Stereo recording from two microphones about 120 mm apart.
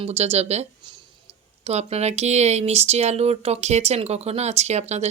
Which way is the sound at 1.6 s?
60° right (ahead or behind).